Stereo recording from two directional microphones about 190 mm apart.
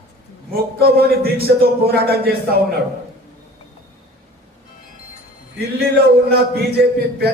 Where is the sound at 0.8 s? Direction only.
55° right (ahead or behind).